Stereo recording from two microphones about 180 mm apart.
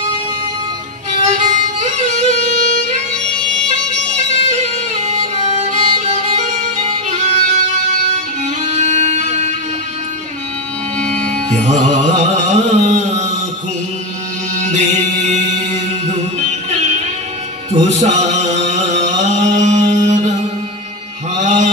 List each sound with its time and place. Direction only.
1.2 s music: 40° right (ahead or behind)
4.3 s music: 40° right (ahead or behind)
11.5 s carnatic music: 40° right (ahead or behind)
14.6 s chant: 40° right (ahead or behind)
17.7 s music: 40° right (ahead or behind)
21.4 s mantra: 45° right (ahead or behind)